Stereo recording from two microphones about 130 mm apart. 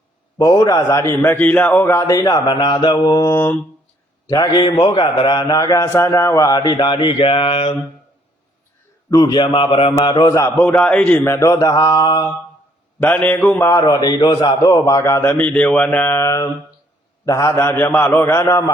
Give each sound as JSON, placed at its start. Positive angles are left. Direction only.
{"t": 0.3, "sound": "a man's voice", "side_deg": 30}
{"t": 1.2, "sound": "a man's voice", "side_deg": 15}
{"t": 3.3, "sound": "mantra", "side_deg": 15}
{"t": 4.3, "sound": "a man's voice", "side_deg": 30}
{"t": 9.0, "sound": "a man's voice", "side_deg": 30}
{"t": 10.6, "sound": "a man's voice", "side_deg": 10}
{"t": 13.0, "sound": "mantra", "side_deg": 10}
{"t": 13.8, "sound": "a man's voice", "side_deg": 30}